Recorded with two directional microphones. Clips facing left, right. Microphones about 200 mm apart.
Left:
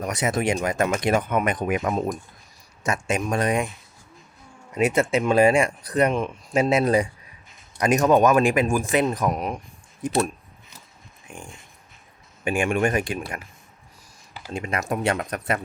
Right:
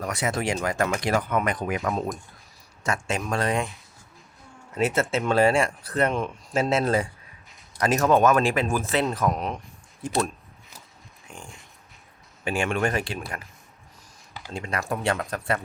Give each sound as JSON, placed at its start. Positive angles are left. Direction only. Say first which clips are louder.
{"t": 0.0, "sound": "speech", "louder": "left 3 dB", "side_deg": 20}
{"t": 1.9, "sound": "speech", "louder": "left 3 dB", "side_deg": 0}
{"t": 2.8, "sound": "speech", "louder": "left 3 dB", "side_deg": 20}
{"t": 4.7, "sound": "speech", "louder": "left 3 dB", "side_deg": 15}
{"t": 11.3, "sound": "speech", "louder": "left 3 dB", "side_deg": 15}
{"t": 12.5, "sound": "speech", "louder": "left 3 dB", "side_deg": 15}
{"t": 14.5, "sound": "speech", "louder": "left 3 dB", "side_deg": 20}